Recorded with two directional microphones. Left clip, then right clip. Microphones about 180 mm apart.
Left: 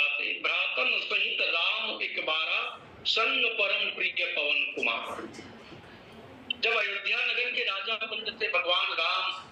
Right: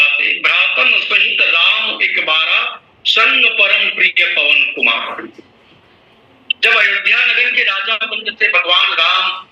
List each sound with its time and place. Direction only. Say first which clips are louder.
0.0 s a sound: right 16 dB; 50° right (ahead or behind)
3.2 s a man's voice: right 16 dB; 50° right (ahead or behind)
6.6 s a man's voice: right 17 dB; 50° right (ahead or behind)